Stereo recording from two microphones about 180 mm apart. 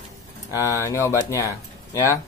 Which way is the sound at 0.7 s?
15° left (ahead or behind).